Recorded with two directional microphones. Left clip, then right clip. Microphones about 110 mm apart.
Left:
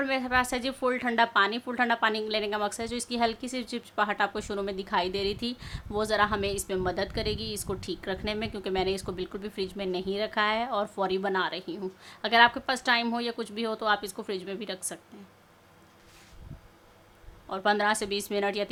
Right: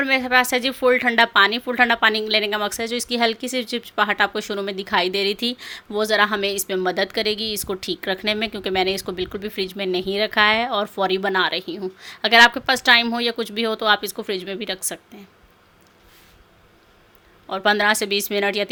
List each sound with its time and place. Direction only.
0.0 s a woman's voice: 20° right (ahead or behind)
17.5 s a woman's voice: 20° right (ahead or behind)